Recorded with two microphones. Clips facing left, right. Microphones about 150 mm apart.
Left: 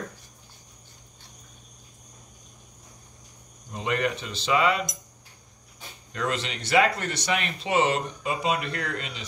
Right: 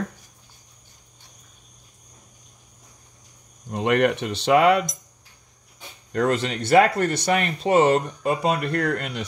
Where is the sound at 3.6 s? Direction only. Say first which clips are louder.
Right 7 dB; 65° right (ahead or behind).